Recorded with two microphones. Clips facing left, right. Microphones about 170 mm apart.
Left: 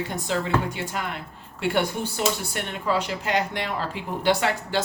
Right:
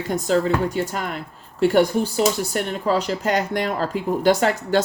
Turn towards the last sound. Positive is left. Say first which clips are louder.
# right 5 dB
turn(degrees=-40)  # may be behind; listen again after turning